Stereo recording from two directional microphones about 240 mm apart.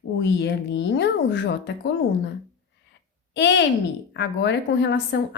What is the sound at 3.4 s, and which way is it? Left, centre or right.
A woman's voice, left.